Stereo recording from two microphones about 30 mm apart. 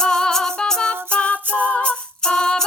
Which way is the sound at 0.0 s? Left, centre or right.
Left.